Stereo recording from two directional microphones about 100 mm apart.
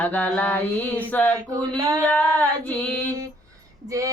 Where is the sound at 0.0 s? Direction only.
15° left (ahead or behind).